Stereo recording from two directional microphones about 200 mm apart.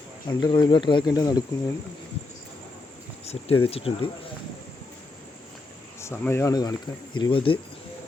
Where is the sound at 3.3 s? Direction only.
30° left (ahead or behind).